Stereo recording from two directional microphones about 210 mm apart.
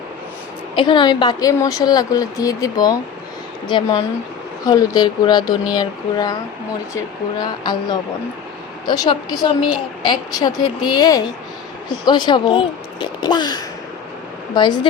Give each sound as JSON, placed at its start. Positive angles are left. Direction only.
{"t": 0.8, "sound": "a woman's voice", "side_deg": 20}